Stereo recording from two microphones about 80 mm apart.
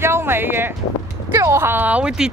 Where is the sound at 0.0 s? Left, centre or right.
Right.